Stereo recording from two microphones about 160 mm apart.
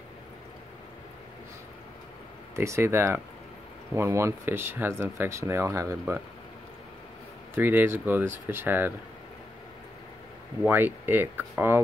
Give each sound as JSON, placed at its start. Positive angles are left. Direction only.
{"t": 2.5, "sound": "speech", "side_deg": -15}
{"t": 7.5, "sound": "speech", "side_deg": -15}
{"t": 10.6, "sound": "speech", "side_deg": -10}